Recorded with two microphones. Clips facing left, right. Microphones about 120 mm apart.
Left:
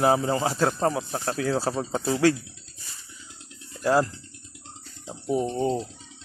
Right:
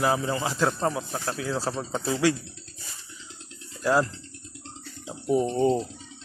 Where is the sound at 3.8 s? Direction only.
25° left (ahead or behind).